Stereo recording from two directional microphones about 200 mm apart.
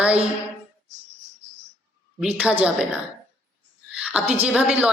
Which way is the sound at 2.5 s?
5° right (ahead or behind).